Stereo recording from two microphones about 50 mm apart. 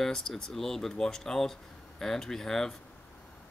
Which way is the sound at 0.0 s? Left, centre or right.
Centre.